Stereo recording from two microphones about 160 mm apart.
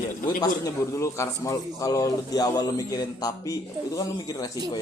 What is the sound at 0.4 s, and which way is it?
A man's voice, 20° left (ahead or behind).